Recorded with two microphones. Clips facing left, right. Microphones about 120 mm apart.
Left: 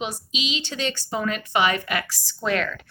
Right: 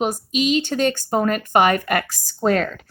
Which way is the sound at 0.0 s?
50° right (ahead or behind).